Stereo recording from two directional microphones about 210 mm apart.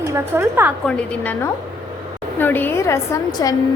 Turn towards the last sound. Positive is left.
turn(degrees=15)  # may be behind; listen again after turning